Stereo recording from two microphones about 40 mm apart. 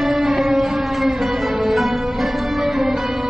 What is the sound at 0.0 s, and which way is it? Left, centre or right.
Music, centre.